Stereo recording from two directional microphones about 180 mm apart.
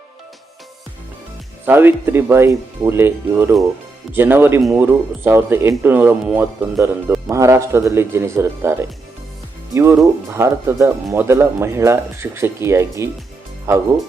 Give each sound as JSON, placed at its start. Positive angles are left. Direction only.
{"t": 1.6, "sound": "speech", "side_deg": -10}